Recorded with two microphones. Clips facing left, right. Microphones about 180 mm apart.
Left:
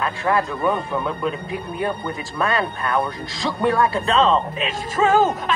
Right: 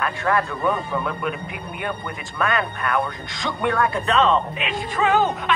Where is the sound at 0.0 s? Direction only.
25° left (ahead or behind).